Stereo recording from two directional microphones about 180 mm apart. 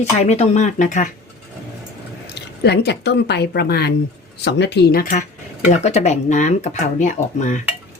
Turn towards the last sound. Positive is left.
turn(degrees=45)  # may be behind; listen again after turning